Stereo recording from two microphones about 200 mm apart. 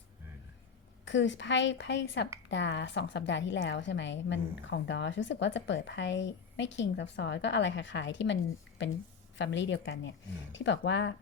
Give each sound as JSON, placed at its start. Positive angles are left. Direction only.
{"t": 1.0, "sound": "a woman's voice", "side_deg": 65}
{"t": 9.4, "sound": "a woman's voice", "side_deg": 65}